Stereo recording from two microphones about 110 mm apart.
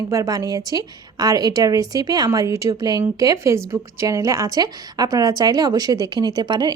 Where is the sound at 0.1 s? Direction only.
30° right (ahead or behind).